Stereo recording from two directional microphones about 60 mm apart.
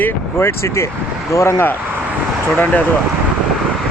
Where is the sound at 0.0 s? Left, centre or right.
Left.